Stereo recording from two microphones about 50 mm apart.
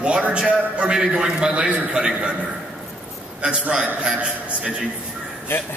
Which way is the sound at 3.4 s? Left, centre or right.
Right.